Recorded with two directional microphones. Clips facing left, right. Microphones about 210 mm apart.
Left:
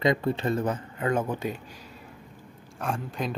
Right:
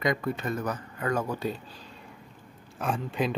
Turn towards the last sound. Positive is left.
turn(degrees=0)  # may be behind; listen again after turning